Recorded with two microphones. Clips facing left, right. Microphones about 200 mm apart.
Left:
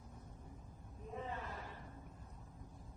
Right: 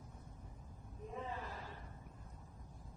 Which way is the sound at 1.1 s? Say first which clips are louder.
Even; centre (ahead or behind).